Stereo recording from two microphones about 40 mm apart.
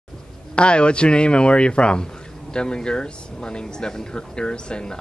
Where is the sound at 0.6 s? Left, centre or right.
Left.